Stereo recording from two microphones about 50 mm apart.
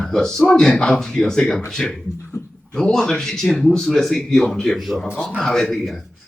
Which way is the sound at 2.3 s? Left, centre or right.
Left.